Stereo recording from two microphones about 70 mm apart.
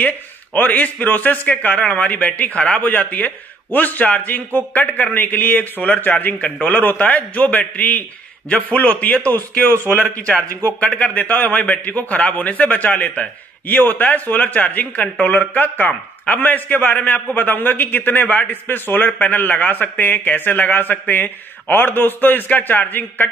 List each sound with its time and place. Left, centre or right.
0.0 s a man's voice: left